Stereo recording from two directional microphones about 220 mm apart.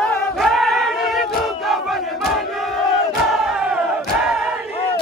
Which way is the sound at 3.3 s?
Centre (ahead or behind).